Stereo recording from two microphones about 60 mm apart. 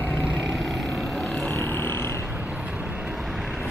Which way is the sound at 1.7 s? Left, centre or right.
Left.